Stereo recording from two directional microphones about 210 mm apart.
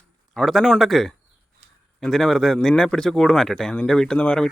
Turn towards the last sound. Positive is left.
turn(degrees=5)  # may be behind; listen again after turning